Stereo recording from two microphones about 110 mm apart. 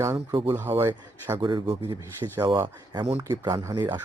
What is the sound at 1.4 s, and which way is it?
Speech, 40° right (ahead or behind).